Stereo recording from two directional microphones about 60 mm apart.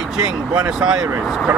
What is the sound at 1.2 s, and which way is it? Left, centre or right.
Speech, centre.